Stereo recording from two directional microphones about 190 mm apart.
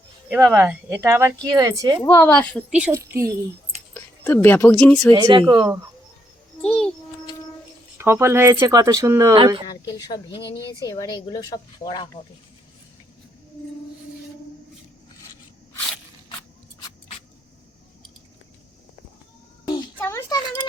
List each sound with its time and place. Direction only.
0.3 s speech: 5° right (ahead or behind)
2.0 s a woman's voice: 10° left (ahead or behind)
2.9 s speech: 15° right (ahead or behind)
3.9 s speech: 10° left (ahead or behind)
5.1 s speech: 25° right (ahead or behind)
6.6 s a child's voice: 5° left (ahead or behind)
7.9 s speech: 15° right (ahead or behind)
10.0 s speech: 25° left (ahead or behind)
20.0 s a sound: 15° left (ahead or behind)